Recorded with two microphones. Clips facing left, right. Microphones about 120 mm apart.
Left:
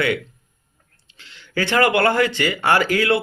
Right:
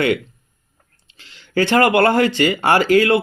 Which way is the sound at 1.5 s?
50° right (ahead or behind).